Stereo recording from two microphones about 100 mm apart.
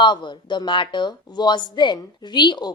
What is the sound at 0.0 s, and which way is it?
Speech, 50° left (ahead or behind).